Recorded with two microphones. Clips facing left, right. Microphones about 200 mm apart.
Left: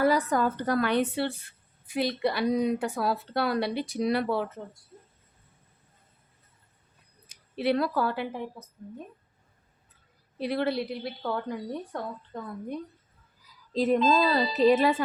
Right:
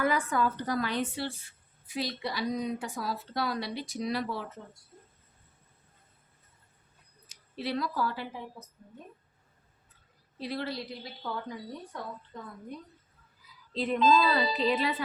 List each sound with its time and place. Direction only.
0.0 s speech: 40° left (ahead or behind); by 4.4 s 60° left (ahead or behind)
7.3 s speech: 60° left (ahead or behind)
10.3 s speech: 60° left (ahead or behind)
13.7 s speech: 40° left (ahead or behind)